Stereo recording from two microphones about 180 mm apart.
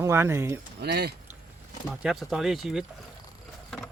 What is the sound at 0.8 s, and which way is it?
Speech, 60° right (ahead or behind).